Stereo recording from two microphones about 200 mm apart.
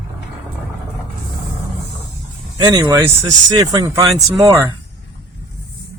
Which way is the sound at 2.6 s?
20° right (ahead or behind).